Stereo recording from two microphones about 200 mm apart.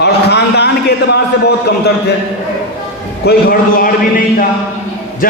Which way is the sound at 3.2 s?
45° left (ahead or behind).